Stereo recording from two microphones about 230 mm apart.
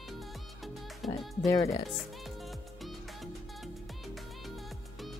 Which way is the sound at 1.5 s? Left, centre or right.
Centre.